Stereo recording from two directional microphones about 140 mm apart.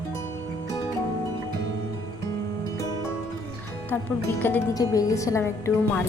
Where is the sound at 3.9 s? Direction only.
15° left (ahead or behind).